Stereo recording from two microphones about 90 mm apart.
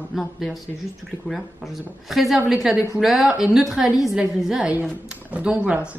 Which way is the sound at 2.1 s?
Centre (ahead or behind).